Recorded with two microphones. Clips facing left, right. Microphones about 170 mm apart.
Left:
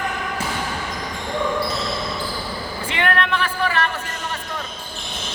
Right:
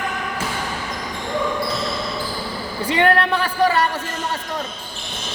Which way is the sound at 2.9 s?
35° right (ahead or behind).